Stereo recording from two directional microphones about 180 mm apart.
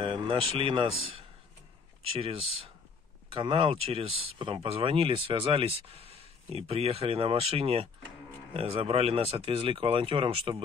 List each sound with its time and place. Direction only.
0.0 s speech: 30° right (ahead or behind)
2.1 s speech: 30° right (ahead or behind)